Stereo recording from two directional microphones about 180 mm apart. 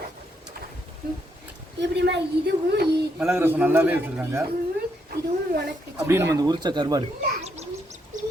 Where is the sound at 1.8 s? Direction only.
75° right (ahead or behind).